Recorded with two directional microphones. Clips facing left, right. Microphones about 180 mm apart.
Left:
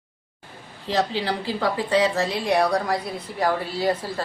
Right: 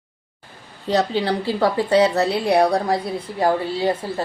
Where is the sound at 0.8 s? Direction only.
40° right (ahead or behind).